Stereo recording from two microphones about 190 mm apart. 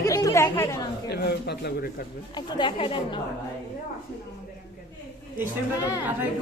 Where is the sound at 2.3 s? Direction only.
25° left (ahead or behind).